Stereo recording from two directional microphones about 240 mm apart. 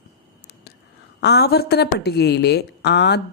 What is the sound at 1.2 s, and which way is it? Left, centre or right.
A woman's voice, left.